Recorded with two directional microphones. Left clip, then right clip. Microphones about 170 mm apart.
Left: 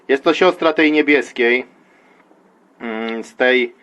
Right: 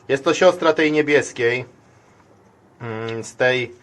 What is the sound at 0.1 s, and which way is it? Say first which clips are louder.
Speech: left 1 dB; 35° left (ahead or behind).